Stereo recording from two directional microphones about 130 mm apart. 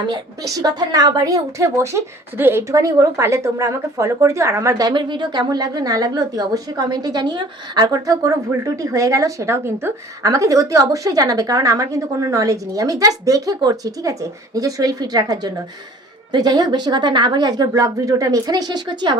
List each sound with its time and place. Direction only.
0.1 s a woman's voice: 30° right (ahead or behind)